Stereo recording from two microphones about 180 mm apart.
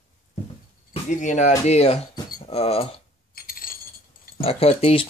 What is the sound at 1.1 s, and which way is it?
Speech, 45° left (ahead or behind).